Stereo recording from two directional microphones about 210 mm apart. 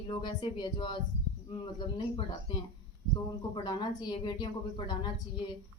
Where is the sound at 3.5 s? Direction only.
20° left (ahead or behind).